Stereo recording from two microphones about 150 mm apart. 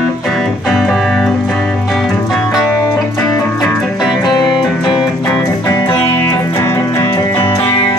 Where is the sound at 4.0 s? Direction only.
25° left (ahead or behind).